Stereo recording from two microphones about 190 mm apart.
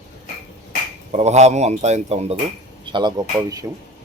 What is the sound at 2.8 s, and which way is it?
Speech, 25° right (ahead or behind).